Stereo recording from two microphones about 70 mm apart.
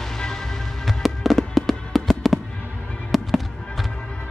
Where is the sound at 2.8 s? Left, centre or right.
Centre.